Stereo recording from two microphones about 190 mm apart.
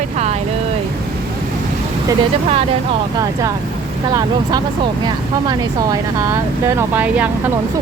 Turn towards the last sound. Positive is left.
turn(degrees=-10)  # may be behind; listen again after turning